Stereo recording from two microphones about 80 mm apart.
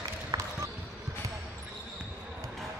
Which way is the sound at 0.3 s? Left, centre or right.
Right.